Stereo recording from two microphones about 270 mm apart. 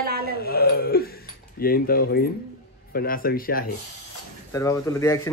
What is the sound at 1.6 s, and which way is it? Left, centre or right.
A man's voice, left.